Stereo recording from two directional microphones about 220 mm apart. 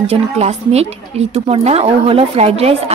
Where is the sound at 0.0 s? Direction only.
30° right (ahead or behind).